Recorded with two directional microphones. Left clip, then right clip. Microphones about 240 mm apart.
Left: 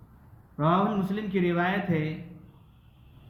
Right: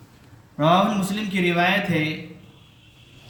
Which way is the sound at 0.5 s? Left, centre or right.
Centre.